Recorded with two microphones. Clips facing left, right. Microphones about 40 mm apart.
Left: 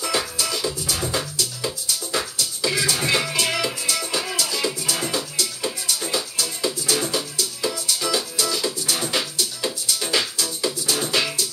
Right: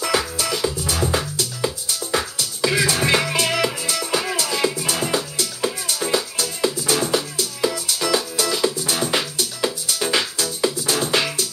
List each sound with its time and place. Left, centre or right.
0.4 s music: right